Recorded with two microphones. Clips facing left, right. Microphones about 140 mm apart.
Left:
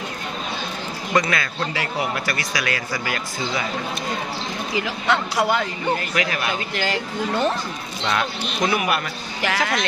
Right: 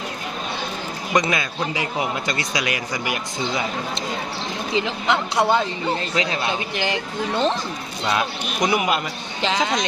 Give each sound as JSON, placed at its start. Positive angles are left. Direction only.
{"t": 1.1, "sound": "speech", "side_deg": -20}
{"t": 8.6, "sound": "speech", "side_deg": -20}